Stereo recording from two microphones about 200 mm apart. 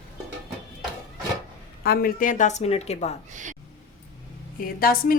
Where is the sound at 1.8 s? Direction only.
50° left (ahead or behind); by 3.1 s 35° left (ahead or behind).